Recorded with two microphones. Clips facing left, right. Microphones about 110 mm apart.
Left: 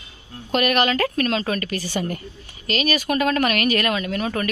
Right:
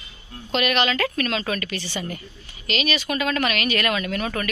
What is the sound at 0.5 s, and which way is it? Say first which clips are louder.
A woman's voice: left 2 dB; 40° left (ahead or behind).